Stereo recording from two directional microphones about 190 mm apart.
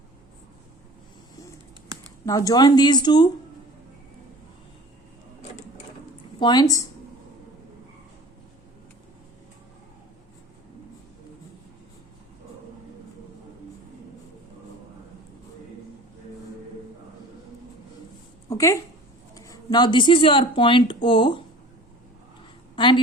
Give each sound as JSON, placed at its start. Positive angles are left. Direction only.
{"t": 2.2, "sound": "speech", "side_deg": 15}
{"t": 6.4, "sound": "speech", "side_deg": 20}
{"t": 18.4, "sound": "a sound", "side_deg": 15}
{"t": 19.3, "sound": "speech", "side_deg": 20}
{"t": 22.7, "sound": "a woman's voice", "side_deg": 25}